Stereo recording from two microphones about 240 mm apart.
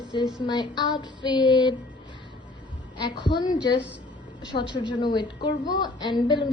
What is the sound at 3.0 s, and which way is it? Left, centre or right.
A woman's voice, centre.